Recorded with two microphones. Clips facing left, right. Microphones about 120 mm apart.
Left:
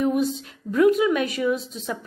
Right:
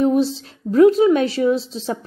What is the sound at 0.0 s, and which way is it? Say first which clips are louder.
A woman's voice: right 5 dB; 30° right (ahead or behind).